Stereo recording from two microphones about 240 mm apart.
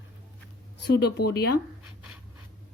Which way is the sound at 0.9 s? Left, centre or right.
Left.